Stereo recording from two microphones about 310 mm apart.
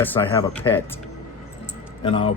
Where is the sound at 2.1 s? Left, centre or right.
Centre.